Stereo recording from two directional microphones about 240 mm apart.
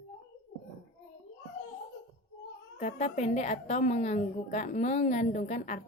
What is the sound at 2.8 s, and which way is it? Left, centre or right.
A woman's voice, left.